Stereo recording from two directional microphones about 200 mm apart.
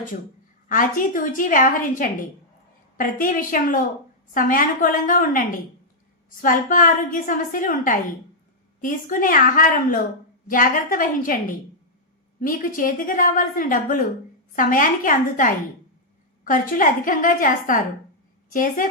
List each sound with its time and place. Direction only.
0.7 s a woman's voice: 40° left (ahead or behind)
12.4 s a woman's voice: 45° left (ahead or behind)